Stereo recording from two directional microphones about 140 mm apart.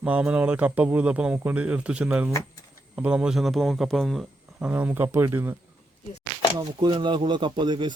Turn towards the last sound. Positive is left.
turn(degrees=-35)  # may be behind; listen again after turning